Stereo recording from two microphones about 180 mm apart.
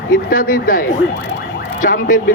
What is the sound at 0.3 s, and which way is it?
Speech, 50° left (ahead or behind).